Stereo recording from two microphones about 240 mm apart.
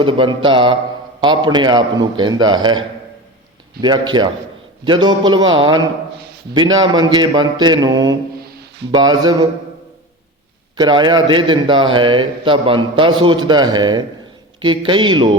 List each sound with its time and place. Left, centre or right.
0.0 s a man's voice: right
10.8 s a man's voice: centre